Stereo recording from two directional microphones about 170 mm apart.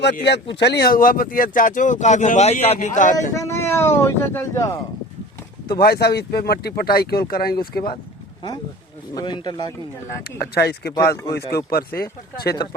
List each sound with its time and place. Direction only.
0.0 s speech: 85° left; by 3.2 s 50° left (ahead or behind)
3.3 s speech: 15° left (ahead or behind)
5.8 s speech: 70° left (ahead or behind)
9.1 s speech: 25° left (ahead or behind)
10.5 s speech: 70° left (ahead or behind)